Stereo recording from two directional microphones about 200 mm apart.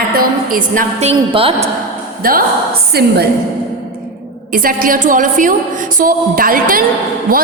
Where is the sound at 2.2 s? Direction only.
45° right (ahead or behind).